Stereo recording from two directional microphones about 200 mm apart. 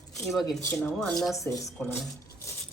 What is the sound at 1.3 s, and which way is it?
Speech, 15° left (ahead or behind).